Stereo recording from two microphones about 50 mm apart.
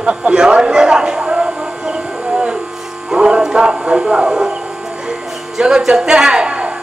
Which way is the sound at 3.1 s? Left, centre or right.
Centre.